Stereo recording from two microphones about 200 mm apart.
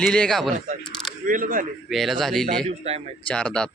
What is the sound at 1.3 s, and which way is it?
Speech, 45° right (ahead or behind).